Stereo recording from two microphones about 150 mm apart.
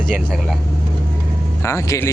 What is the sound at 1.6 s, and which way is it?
Speech, 20° left (ahead or behind).